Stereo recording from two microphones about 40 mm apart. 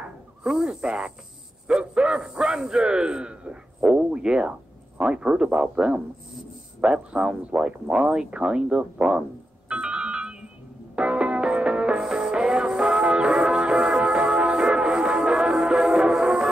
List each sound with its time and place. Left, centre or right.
0.4 s speech: centre
9.7 s music: right
12.0 s music: centre